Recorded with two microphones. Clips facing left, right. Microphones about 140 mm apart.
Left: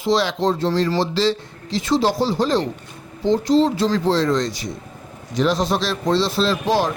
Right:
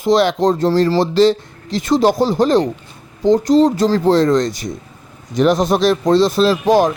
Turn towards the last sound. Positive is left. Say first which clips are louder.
# right 6 dB
turn(degrees=-50)  # may be behind; listen again after turning